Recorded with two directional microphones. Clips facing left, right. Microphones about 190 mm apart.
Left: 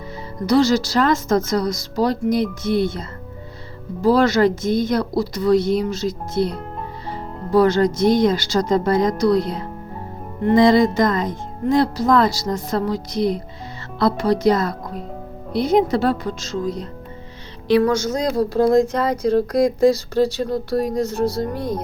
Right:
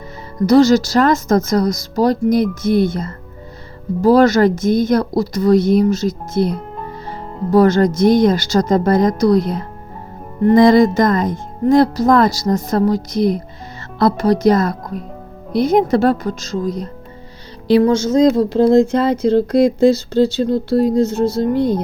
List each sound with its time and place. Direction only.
0.4 s a woman's voice: 45° right (ahead or behind)
7.5 s a woman's voice: 45° right (ahead or behind)
17.7 s speech: 25° right (ahead or behind)